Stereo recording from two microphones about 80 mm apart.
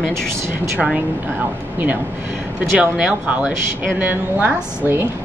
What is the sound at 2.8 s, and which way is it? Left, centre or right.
Speech, centre.